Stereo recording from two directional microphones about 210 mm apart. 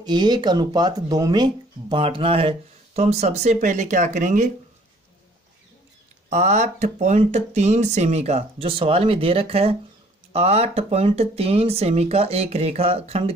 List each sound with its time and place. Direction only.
0.0 s speech: 20° right (ahead or behind)
6.3 s speech: 35° right (ahead or behind)